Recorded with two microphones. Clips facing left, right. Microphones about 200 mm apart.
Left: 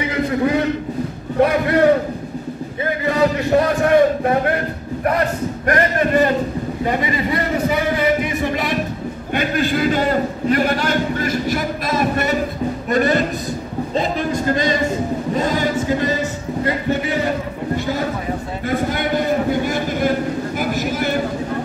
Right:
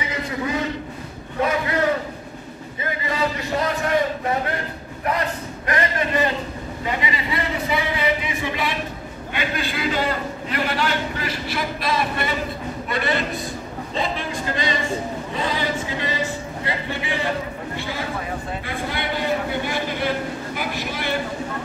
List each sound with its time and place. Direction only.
1.4 s a man's voice: 60° left (ahead or behind)
3.1 s a man's voice: 55° left (ahead or behind)
18.7 s a sound: 45° left (ahead or behind)